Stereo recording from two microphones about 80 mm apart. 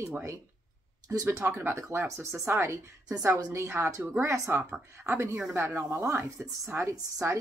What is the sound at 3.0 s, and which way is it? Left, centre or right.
Speech, right.